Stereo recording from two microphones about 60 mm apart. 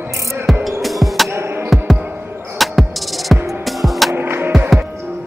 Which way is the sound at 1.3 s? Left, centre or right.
Right.